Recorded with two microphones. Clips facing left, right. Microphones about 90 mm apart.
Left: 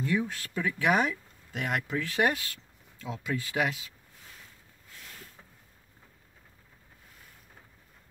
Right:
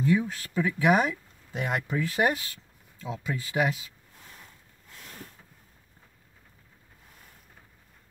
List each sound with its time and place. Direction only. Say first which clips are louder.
0.0 s speech: right 4 dB; 15° right (ahead or behind)
1.5 s speech: right 2 dB; 25° right (ahead or behind)